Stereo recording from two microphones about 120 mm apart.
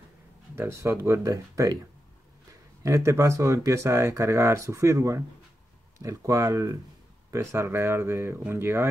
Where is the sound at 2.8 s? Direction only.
25° right (ahead or behind).